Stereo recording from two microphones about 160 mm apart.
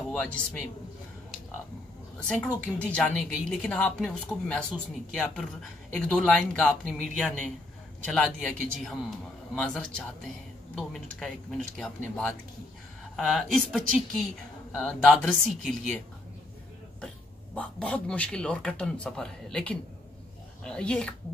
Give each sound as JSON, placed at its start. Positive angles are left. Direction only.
{"t": 0.1, "sound": "speech", "side_deg": 5}
{"t": 2.2, "sound": "a woman's voice", "side_deg": 5}
{"t": 17.6, "sound": "a woman's voice", "side_deg": 5}